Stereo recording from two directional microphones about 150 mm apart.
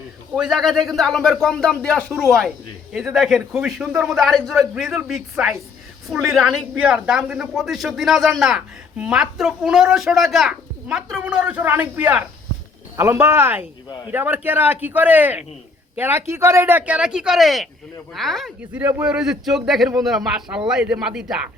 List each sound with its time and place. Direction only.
0.3 s speech: centre (ahead or behind)